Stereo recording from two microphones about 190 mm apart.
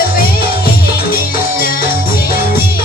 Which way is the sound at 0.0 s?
50° left (ahead or behind).